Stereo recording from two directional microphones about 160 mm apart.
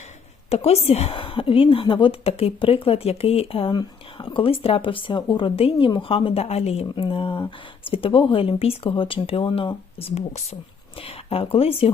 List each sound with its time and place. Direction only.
0.5 s a woman's voice: 40° left (ahead or behind)